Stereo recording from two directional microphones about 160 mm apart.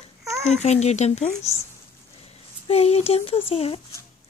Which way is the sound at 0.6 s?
45° left (ahead or behind).